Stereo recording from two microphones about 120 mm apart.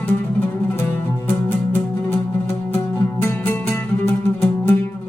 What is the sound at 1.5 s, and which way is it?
Music, 20° left (ahead or behind).